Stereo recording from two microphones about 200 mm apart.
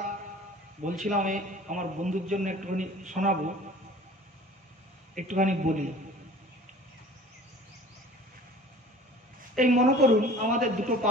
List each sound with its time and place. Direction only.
0.8 s a man's voice: 35° right (ahead or behind)
5.1 s a man's voice: 40° right (ahead or behind)
9.6 s a man's voice: 40° right (ahead or behind)